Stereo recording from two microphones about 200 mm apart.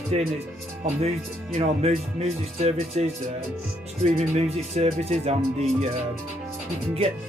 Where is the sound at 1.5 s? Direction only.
30° right (ahead or behind).